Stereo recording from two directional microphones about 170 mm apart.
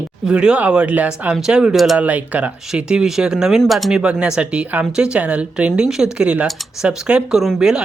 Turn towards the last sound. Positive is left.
turn(degrees=-5)  # may be behind; listen again after turning